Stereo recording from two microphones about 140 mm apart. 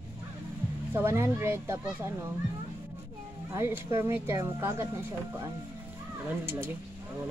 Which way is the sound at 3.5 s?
20° right (ahead or behind).